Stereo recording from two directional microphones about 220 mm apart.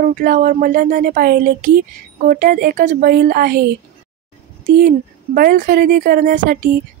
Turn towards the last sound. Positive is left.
turn(degrees=-35)  # may be behind; listen again after turning